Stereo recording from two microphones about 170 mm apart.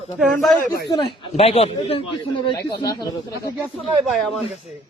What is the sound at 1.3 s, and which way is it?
A man's voice, 35° left (ahead or behind).